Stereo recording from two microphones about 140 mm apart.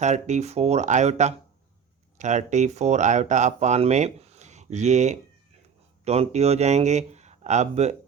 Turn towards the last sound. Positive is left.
turn(degrees=-50)  # may be behind; listen again after turning